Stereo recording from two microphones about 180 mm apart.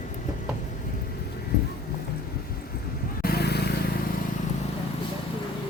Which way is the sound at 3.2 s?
60° left (ahead or behind).